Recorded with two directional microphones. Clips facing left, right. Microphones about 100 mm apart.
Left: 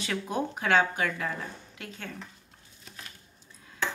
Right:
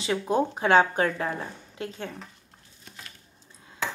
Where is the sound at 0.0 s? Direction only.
25° right (ahead or behind).